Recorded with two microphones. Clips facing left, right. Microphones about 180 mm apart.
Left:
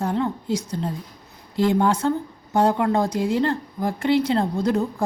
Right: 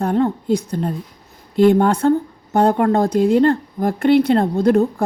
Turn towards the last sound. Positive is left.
turn(degrees=-60)  # may be behind; listen again after turning